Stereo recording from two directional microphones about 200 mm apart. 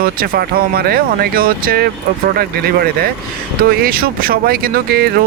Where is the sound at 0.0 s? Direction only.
45° right (ahead or behind).